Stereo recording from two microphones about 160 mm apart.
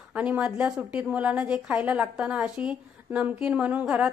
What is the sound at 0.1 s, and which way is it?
Speech, 10° right (ahead or behind).